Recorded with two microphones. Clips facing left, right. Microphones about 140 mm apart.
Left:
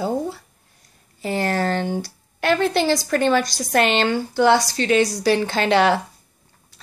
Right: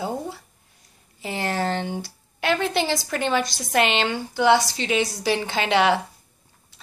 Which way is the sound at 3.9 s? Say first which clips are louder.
Left 4 dB; 50° left (ahead or behind).